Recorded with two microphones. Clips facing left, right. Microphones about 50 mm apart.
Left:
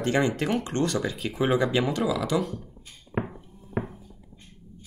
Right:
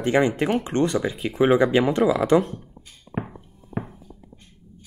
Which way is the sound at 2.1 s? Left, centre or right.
Right.